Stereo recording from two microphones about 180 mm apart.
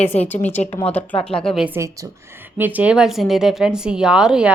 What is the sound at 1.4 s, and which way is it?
A woman's voice, 5° right (ahead or behind).